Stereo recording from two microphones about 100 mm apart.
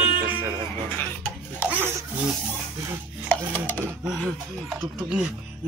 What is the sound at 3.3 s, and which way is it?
Chopping, 15° left (ahead or behind).